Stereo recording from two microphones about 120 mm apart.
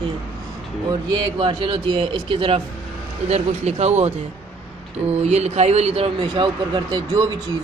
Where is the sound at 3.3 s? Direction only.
65° right (ahead or behind).